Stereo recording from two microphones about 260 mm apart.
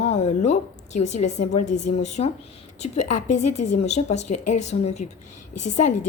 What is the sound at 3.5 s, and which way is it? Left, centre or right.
A woman's voice, left.